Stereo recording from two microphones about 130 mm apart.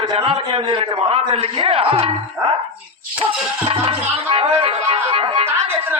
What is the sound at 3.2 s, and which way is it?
Music, 45° right (ahead or behind).